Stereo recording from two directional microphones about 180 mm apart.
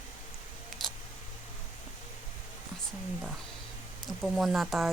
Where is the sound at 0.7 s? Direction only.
Centre (ahead or behind).